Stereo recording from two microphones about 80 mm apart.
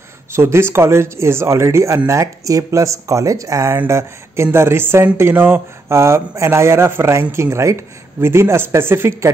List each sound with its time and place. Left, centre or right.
0.3 s speech: right